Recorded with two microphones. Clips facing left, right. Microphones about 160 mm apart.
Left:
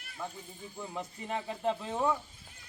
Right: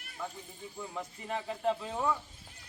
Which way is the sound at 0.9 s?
20° left (ahead or behind).